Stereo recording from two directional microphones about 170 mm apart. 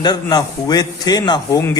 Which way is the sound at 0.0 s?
25° left (ahead or behind).